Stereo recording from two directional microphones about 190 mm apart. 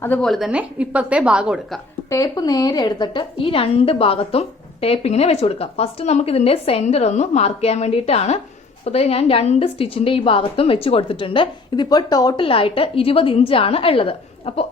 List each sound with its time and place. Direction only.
0.0 s a woman's voice: 5° left (ahead or behind)
2.0 s a woman's voice: 15° left (ahead or behind)